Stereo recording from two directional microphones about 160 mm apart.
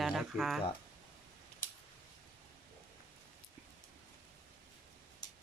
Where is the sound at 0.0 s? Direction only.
Centre (ahead or behind).